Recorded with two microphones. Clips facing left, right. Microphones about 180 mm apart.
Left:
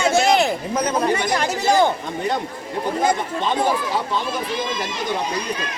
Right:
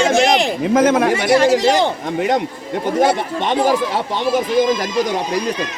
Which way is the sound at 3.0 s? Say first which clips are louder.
Right 5 dB; 85° right.